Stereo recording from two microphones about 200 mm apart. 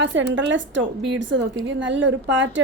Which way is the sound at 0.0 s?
65° right (ahead or behind).